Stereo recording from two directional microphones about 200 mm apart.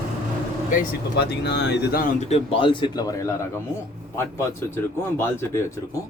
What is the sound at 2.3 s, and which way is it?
A man's voice, 25° left (ahead or behind).